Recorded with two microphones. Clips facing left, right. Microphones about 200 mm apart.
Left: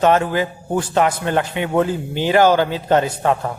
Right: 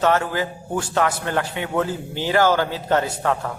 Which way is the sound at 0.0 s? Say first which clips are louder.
Left 4 dB; 20° left (ahead or behind).